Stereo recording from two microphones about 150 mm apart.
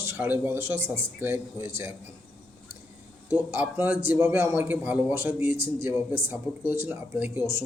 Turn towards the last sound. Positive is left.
turn(degrees=-15)  # may be behind; listen again after turning